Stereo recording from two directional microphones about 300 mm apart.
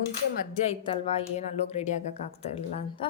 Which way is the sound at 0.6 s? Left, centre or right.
Centre.